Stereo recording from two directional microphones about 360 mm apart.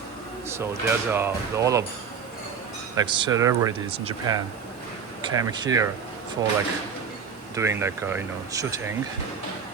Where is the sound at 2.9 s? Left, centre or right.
Centre.